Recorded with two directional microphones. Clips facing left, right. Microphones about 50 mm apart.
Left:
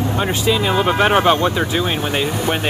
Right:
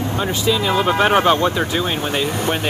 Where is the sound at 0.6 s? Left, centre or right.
Centre.